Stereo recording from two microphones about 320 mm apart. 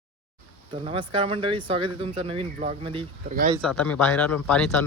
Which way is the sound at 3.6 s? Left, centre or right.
Centre.